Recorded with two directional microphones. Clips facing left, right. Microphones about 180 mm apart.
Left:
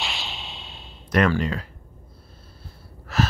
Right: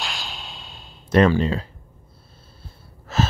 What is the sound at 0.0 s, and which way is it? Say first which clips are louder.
Whip: even; centre (ahead or behind).